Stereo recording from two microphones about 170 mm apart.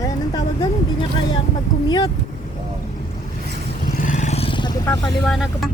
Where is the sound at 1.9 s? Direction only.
25° left (ahead or behind).